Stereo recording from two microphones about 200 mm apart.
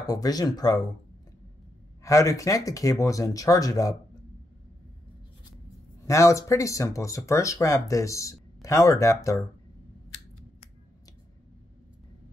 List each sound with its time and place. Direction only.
0.0 s speech: 20° left (ahead or behind)
2.0 s speech: 15° left (ahead or behind)
6.0 s speech: 15° left (ahead or behind)